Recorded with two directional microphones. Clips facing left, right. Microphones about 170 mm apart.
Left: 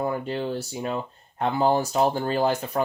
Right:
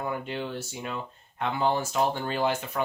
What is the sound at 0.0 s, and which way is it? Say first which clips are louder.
Speech: left 5 dB; 35° left (ahead or behind).